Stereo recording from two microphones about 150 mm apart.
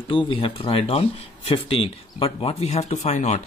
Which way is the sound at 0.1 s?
35° left (ahead or behind).